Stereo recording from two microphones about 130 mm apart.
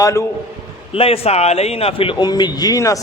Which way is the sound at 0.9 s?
45° left (ahead or behind).